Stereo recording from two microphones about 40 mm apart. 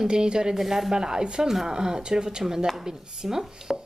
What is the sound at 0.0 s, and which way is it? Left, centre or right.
Speech, right.